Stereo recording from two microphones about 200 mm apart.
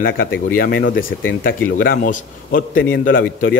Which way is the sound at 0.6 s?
50° left (ahead or behind).